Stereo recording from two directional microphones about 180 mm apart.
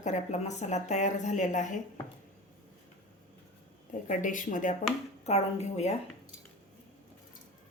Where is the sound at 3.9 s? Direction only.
45° left (ahead or behind).